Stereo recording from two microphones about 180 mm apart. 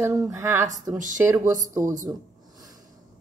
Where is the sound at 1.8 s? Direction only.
45° right (ahead or behind).